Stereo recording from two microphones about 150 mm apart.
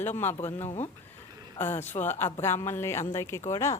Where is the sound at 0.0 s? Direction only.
15° left (ahead or behind).